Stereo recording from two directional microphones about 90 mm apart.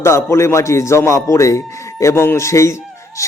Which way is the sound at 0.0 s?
30° left (ahead or behind).